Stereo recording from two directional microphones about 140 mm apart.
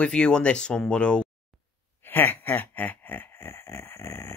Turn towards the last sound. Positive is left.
turn(degrees=20)  # may be behind; listen again after turning